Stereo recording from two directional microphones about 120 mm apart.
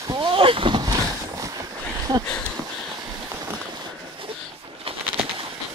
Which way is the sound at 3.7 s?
45° right (ahead or behind).